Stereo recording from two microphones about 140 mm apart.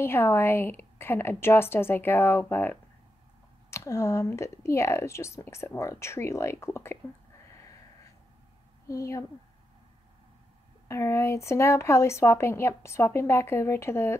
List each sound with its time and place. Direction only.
0.0 s a woman's voice: 15° left (ahead or behind)
8.8 s a woman's voice: 20° left (ahead or behind)
10.9 s speech: 20° left (ahead or behind)